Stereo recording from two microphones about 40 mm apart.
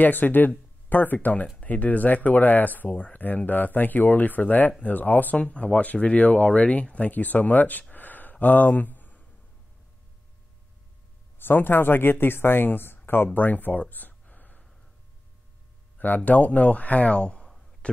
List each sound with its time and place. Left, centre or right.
0.0 s speech: left
7.1 s speech: left
7.9 s a sound: left
11.3 s speech: left
13.4 s speech: left
14.2 s gasp: left
16.3 s speech: left